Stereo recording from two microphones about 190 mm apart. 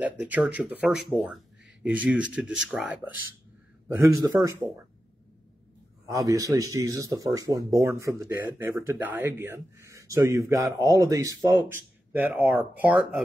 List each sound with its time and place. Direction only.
0.0 s speech: 10° right (ahead or behind)
6.0 s speech: 15° right (ahead or behind)